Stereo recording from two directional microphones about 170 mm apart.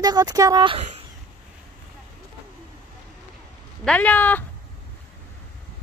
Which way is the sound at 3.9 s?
10° left (ahead or behind).